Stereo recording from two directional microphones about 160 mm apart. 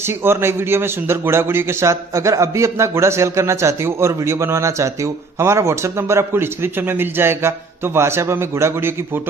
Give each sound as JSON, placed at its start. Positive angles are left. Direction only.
{"t": 0.0, "sound": "a man's voice", "side_deg": -15}